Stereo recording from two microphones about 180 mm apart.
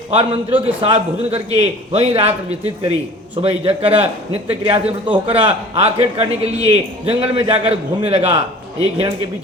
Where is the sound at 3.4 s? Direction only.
35° right (ahead or behind).